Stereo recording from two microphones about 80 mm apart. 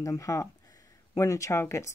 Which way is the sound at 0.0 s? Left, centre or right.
Left.